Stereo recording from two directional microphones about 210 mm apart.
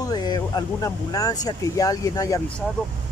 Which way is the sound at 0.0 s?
20° left (ahead or behind).